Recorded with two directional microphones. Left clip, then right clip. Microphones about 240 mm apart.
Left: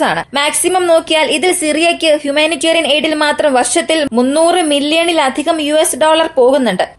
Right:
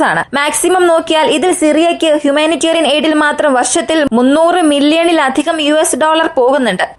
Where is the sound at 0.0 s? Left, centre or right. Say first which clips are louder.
Right 2 dB; right.